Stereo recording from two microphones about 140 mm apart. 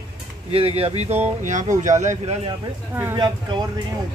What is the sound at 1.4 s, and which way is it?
Speech, 60° right (ahead or behind).